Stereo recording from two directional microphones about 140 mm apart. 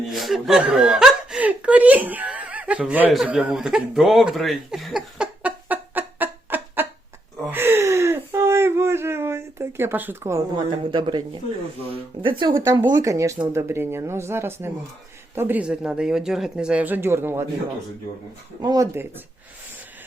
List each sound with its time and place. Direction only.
0.1 s speech: centre (ahead or behind)
7.5 s a sound: 15° right (ahead or behind)
10.6 s speech: 35° right (ahead or behind)
12.2 s speech: 35° right (ahead or behind)
12.9 s speech: 25° right (ahead or behind)
18.6 s speech: 25° right (ahead or behind)